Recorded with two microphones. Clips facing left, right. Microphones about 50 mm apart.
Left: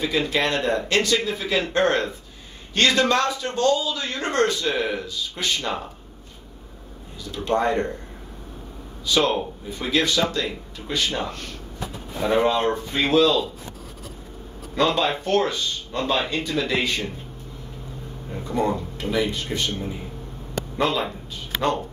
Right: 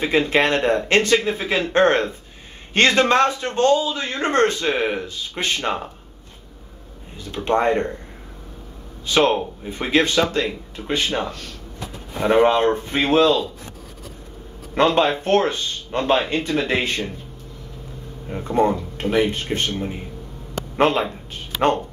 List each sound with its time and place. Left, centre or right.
0.0 s a man's voice: right
7.2 s a man's voice: right
9.0 s a man's voice: right
14.8 s a man's voice: right
18.3 s a man's voice: right